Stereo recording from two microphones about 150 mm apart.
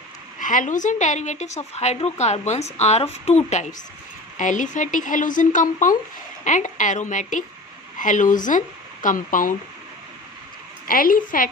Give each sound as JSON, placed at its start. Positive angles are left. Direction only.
{"t": 0.3, "sound": "a woman's voice", "side_deg": 60}
{"t": 10.8, "sound": "a woman's voice", "side_deg": 70}